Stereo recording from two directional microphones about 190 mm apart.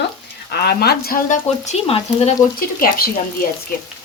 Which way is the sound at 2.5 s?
50° left (ahead or behind).